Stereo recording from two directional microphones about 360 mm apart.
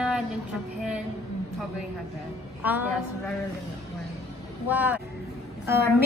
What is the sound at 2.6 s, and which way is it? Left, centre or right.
Speech, centre.